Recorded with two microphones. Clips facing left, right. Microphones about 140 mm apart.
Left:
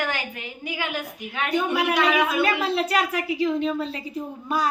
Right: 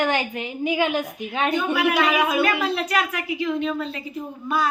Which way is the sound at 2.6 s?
30° left (ahead or behind).